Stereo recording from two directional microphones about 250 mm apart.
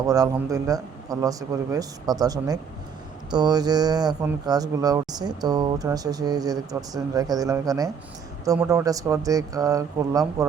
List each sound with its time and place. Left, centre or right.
0.1 s speech: centre